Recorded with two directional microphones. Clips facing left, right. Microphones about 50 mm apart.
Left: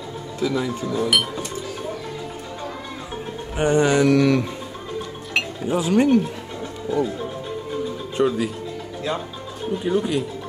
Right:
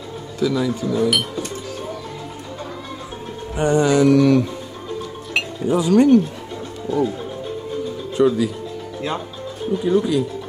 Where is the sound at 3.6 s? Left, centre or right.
Left.